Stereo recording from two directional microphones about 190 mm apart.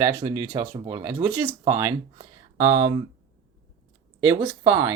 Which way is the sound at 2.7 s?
25° right (ahead or behind).